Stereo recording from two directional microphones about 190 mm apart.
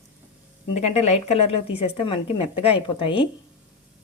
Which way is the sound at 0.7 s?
35° left (ahead or behind).